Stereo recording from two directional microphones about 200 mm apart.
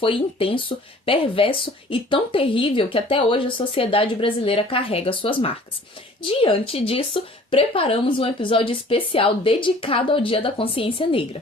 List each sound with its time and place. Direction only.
0.0 s speech: 25° left (ahead or behind)